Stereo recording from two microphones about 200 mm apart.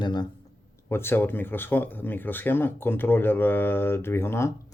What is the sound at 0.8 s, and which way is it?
Speech, 10° left (ahead or behind).